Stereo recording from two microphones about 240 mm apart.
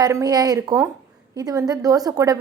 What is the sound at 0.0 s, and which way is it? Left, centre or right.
A woman's voice, centre.